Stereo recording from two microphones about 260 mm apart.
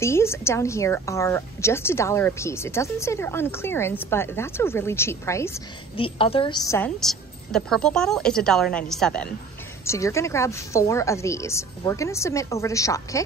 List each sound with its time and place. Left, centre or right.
0.0 s speech: centre